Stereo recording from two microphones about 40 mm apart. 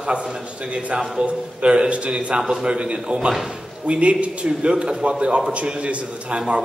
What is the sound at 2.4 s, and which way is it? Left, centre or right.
A man's voice, centre.